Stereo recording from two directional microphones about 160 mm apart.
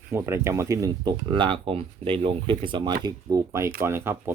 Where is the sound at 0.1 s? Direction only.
15° right (ahead or behind).